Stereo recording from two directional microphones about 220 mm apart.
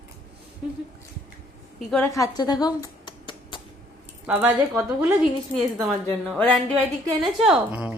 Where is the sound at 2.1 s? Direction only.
15° left (ahead or behind).